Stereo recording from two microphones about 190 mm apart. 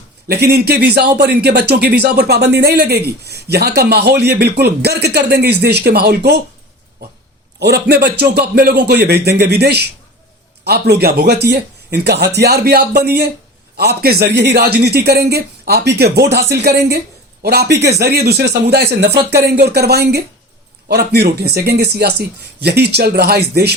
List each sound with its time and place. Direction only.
0.3 s a man's voice: 60° right (ahead or behind)
7.6 s a man's voice: 60° right (ahead or behind)